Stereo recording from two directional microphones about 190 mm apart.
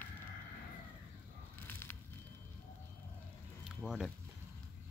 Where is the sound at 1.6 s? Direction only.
10° left (ahead or behind).